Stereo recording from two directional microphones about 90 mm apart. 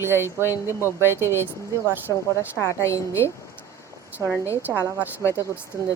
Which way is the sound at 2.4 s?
30° left (ahead or behind).